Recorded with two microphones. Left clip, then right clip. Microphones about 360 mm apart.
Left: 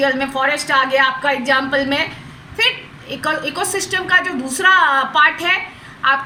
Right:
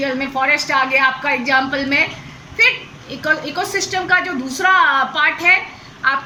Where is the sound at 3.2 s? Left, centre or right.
Left.